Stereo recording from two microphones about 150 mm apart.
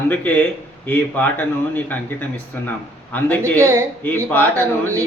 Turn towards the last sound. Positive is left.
turn(degrees=10)  # may be behind; listen again after turning